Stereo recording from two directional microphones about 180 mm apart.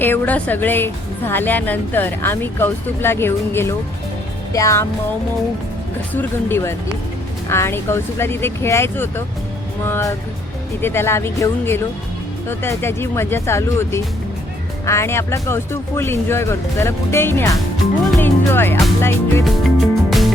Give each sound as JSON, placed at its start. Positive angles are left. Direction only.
{"t": 0.0, "sound": "a woman's voice", "side_deg": 10}
{"t": 6.1, "sound": "a woman's voice", "side_deg": 15}
{"t": 20.1, "sound": "music", "side_deg": 0}